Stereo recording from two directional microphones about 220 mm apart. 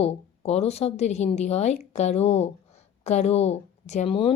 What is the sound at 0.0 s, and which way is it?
A woman's voice, 30° left (ahead or behind).